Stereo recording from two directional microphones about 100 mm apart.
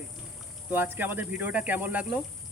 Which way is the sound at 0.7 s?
20° right (ahead or behind).